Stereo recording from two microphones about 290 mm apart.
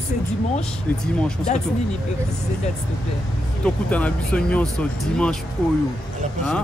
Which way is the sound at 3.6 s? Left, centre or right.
Centre.